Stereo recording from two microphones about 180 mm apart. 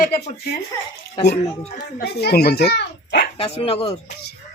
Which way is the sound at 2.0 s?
60° left (ahead or behind).